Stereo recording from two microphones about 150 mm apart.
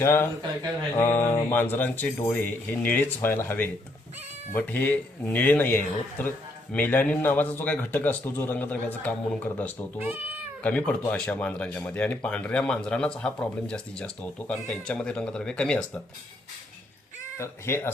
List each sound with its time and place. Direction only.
0.0 s speech: 15° left (ahead or behind)
17.3 s speech: 15° left (ahead or behind)